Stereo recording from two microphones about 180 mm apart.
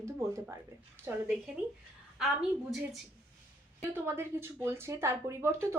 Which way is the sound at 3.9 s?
15° right (ahead or behind).